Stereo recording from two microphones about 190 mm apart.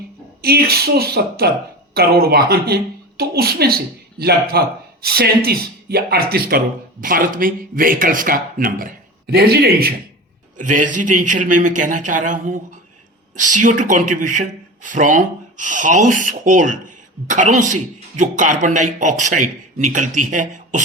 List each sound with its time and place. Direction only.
0.4 s speech: 55° right (ahead or behind)
10.6 s a man's voice: 40° right (ahead or behind)